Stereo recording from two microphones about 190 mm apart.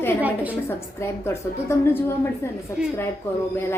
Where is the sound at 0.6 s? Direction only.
15° left (ahead or behind).